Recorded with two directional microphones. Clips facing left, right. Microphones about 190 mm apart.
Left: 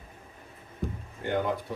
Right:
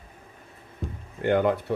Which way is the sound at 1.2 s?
65° right (ahead or behind).